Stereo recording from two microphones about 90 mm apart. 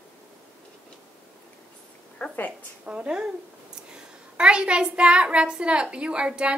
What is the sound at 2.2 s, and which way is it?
Speech, 5° left (ahead or behind).